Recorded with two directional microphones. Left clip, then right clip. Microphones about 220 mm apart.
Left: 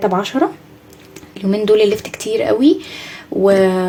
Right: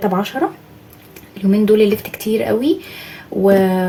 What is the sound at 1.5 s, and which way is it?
Speech, 35° left (ahead or behind).